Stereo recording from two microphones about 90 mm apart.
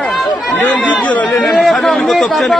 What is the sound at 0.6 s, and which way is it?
Speech, 15° left (ahead or behind).